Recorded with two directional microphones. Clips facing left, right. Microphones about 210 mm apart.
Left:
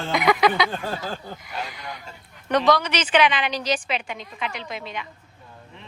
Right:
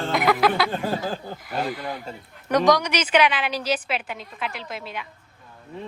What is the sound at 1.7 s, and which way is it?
Speech, 50° right (ahead or behind).